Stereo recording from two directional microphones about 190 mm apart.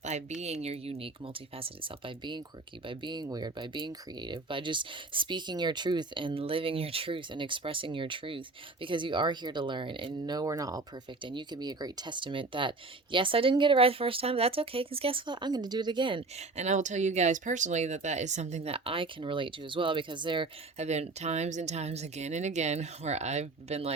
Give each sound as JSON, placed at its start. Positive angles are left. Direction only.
{"t": 0.0, "sound": "speech", "side_deg": -35}